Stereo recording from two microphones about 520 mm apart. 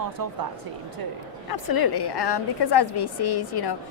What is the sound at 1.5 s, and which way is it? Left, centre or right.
A woman's voice, left.